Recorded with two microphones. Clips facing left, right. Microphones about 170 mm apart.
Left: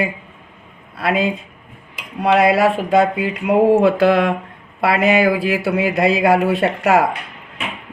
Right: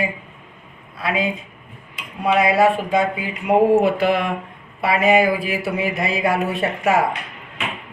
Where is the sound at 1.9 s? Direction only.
80° left.